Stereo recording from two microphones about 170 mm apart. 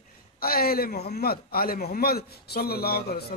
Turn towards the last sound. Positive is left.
turn(degrees=65)  # may be behind; listen again after turning